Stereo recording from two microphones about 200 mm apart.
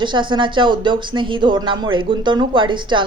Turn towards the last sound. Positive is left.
turn(degrees=-25)  # may be behind; listen again after turning